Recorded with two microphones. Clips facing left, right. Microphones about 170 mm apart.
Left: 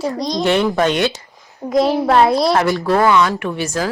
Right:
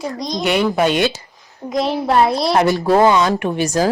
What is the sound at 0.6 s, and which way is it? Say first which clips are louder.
Speech: even; 5° right (ahead or behind).